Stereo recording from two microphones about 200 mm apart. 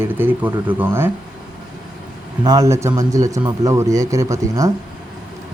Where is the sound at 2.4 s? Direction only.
20° right (ahead or behind).